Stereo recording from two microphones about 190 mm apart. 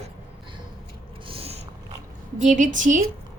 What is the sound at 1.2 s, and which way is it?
Cat, 30° right (ahead or behind).